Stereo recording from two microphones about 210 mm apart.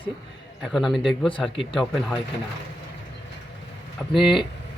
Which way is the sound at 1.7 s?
Centre (ahead or behind).